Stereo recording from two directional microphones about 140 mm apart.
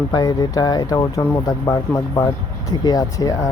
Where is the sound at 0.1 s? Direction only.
30° left (ahead or behind).